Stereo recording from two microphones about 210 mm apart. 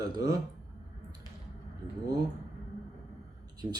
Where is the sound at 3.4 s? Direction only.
20° right (ahead or behind).